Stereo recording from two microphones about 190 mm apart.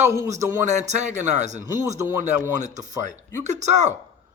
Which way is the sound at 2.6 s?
40° right (ahead or behind).